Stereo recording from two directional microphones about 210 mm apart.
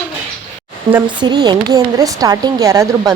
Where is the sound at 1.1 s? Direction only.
20° right (ahead or behind).